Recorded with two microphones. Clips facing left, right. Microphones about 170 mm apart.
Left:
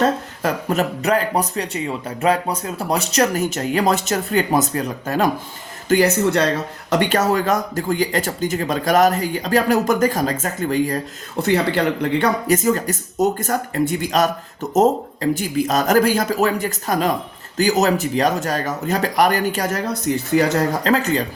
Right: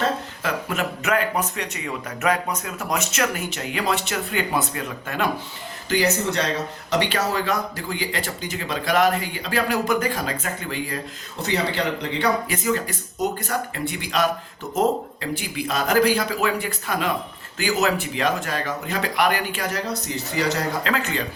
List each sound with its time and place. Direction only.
0.4 s speech: 40° left (ahead or behind)
11.4 s speech: 55° left (ahead or behind)
20.8 s speech: 40° left (ahead or behind)